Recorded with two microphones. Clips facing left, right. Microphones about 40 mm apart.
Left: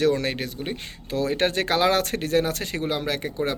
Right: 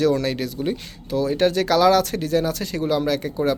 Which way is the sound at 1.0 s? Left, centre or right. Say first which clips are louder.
Right 4 dB; left.